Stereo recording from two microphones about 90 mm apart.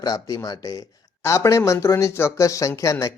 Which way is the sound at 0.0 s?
45° left (ahead or behind).